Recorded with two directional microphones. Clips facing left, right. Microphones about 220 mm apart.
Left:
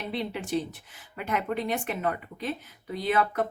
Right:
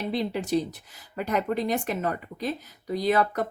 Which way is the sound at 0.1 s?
40° right (ahead or behind).